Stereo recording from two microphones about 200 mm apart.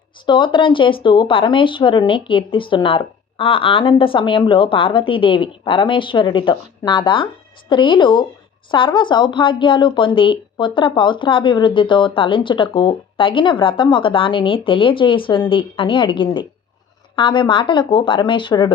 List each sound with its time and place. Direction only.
0.3 s speech: 25° left (ahead or behind)